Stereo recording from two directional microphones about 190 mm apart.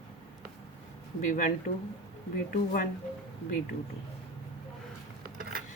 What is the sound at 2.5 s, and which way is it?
Speech, 45° left (ahead or behind).